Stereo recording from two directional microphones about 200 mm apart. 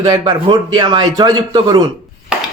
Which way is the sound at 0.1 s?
20° right (ahead or behind).